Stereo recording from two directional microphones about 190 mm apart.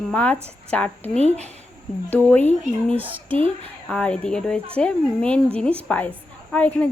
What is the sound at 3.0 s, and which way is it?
Speech, 30° right (ahead or behind).